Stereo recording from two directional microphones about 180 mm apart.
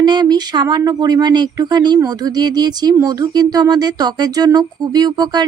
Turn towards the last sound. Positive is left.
turn(degrees=-25)  # may be behind; listen again after turning